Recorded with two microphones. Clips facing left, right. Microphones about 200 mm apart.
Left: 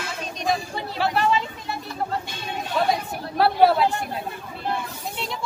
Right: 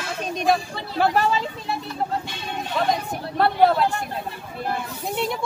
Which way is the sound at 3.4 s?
5° left (ahead or behind).